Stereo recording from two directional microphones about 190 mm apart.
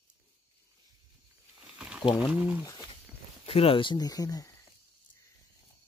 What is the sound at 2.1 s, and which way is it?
Speech, 5° right (ahead or behind).